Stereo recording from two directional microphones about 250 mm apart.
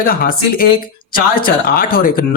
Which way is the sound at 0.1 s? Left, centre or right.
Left.